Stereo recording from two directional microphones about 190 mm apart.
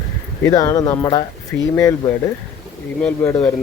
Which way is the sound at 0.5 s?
20° left (ahead or behind).